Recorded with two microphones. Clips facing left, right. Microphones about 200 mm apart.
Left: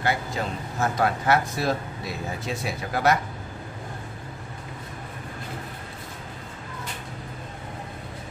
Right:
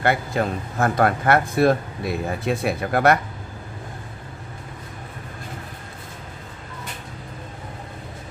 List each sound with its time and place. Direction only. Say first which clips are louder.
0.0 s speech: right 5 dB; 60° right (ahead or behind)